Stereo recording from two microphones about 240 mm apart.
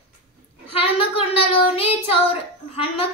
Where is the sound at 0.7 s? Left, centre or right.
Left.